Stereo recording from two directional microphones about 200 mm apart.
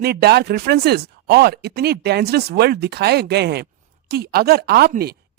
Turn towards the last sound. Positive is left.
turn(degrees=-50)  # may be behind; listen again after turning